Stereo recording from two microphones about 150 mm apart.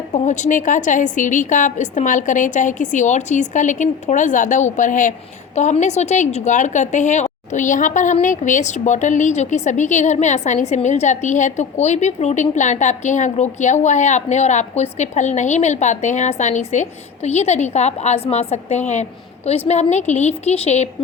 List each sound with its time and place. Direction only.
0.1 s a woman's voice: 55° left (ahead or behind)